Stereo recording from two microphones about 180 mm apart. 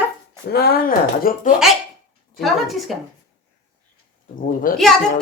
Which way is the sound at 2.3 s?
Centre (ahead or behind).